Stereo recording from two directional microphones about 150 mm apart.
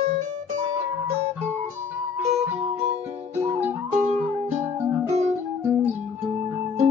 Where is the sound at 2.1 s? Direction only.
15° right (ahead or behind).